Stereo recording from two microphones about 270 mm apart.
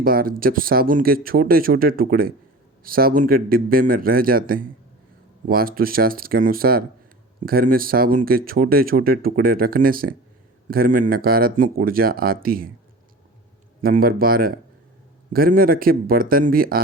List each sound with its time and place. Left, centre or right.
0.0 s speech: right
13.8 s speech: right